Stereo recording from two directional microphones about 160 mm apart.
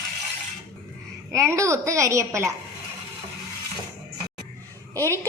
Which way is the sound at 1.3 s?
20° right (ahead or behind).